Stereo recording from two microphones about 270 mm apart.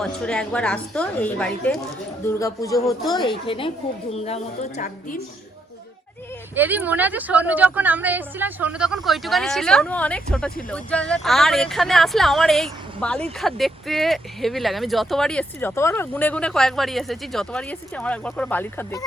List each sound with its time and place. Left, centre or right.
0.0 s a woman's voice: centre; by 5.2 s left
6.6 s speech: centre